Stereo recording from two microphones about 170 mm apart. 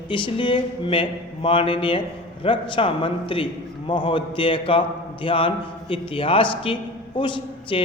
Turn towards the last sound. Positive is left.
turn(degrees=30)  # may be behind; listen again after turning